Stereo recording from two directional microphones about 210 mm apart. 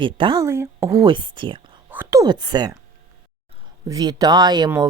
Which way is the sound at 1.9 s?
10° right (ahead or behind).